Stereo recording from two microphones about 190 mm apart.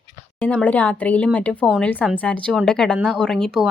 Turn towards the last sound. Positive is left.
turn(degrees=0)  # may be behind; listen again after turning